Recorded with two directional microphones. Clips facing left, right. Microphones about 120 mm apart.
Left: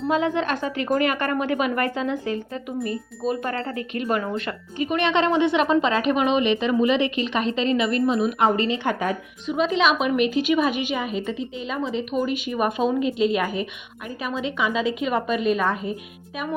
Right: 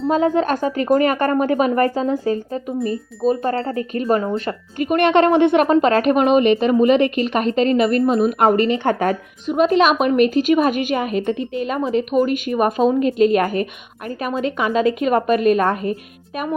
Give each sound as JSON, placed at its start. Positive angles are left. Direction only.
{"t": 0.1, "sound": "speech", "side_deg": -40}
{"t": 4.8, "sound": "speech", "side_deg": -50}